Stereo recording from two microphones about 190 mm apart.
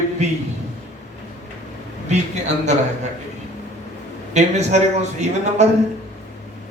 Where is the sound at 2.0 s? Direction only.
35° right (ahead or behind).